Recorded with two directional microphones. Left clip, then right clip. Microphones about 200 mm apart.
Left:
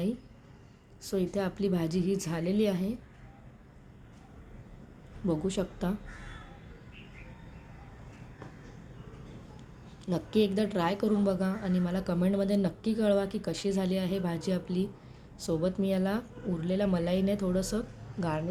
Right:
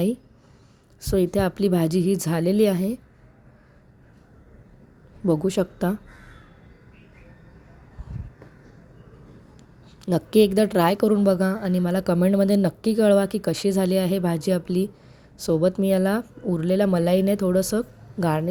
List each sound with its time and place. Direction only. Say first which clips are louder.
1.0 s a woman's voice: right 10 dB; 40° right (ahead or behind)
5.2 s a woman's voice: right 9 dB; 40° right (ahead or behind)
10.1 s a woman's voice: right 10 dB; 40° right (ahead or behind)